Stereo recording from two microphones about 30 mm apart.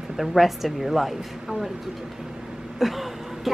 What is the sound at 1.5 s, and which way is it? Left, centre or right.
Speech, right.